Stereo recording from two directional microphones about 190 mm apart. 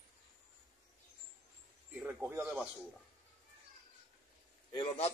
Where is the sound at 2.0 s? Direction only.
10° right (ahead or behind).